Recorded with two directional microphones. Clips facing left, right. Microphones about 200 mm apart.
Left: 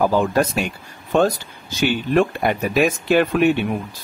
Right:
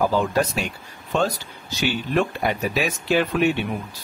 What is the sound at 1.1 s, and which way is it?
Speech, 50° left (ahead or behind).